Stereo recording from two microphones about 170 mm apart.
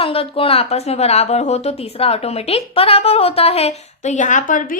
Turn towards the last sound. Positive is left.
turn(degrees=50)  # may be behind; listen again after turning